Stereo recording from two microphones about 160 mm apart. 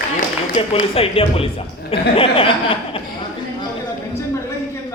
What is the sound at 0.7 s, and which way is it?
Speech, 35° left (ahead or behind).